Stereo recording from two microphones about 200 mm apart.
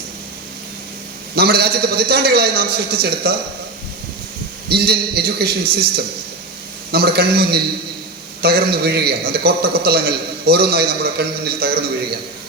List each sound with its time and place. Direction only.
1.4 s a man's voice: 50° right (ahead or behind)
4.7 s a man's voice: 50° right (ahead or behind)